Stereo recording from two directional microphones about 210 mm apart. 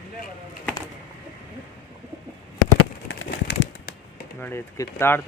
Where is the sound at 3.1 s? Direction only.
60° left (ahead or behind).